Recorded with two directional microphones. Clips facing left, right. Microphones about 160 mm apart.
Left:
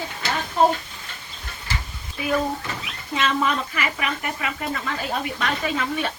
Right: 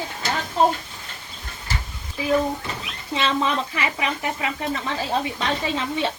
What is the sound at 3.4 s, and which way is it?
Speech, 25° right (ahead or behind).